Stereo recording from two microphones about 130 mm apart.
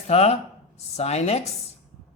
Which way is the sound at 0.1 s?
50° left (ahead or behind).